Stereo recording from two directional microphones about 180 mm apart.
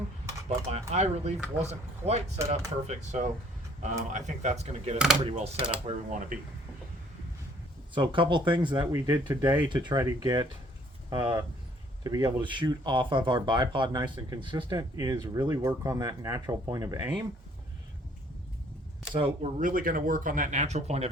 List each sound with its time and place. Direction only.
0.4 s speech: 35° right (ahead or behind)
7.9 s speech: 25° right (ahead or behind)
19.1 s speech: 30° right (ahead or behind)
19.5 s speech: 50° right (ahead or behind)